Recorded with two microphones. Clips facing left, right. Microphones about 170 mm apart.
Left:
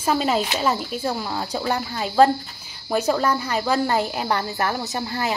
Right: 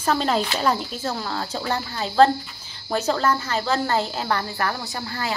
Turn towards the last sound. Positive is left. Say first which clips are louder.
# left 4 dB
turn(degrees=20)  # may be behind; listen again after turning